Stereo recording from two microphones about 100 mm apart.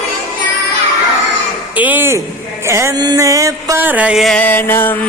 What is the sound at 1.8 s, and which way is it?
Music, 20° right (ahead or behind).